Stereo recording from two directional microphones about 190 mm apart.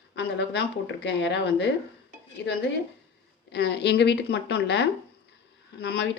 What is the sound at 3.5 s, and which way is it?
Speech, 65° left (ahead or behind).